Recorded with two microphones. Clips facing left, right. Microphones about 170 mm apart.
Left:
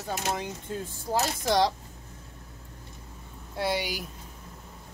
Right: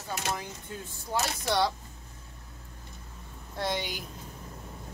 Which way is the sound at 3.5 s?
5° left (ahead or behind).